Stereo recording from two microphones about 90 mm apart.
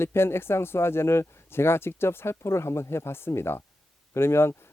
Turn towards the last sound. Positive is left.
turn(degrees=25)  # may be behind; listen again after turning